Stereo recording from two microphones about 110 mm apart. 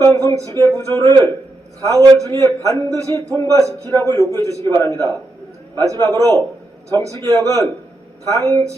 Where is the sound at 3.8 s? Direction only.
25° left (ahead or behind).